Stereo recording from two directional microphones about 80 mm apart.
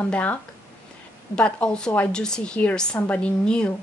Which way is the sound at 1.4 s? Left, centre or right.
Centre.